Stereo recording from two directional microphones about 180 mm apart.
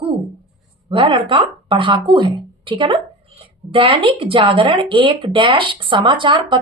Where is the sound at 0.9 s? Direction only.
30° right (ahead or behind).